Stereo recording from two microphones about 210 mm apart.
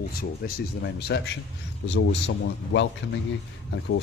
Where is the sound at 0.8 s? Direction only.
55° left (ahead or behind).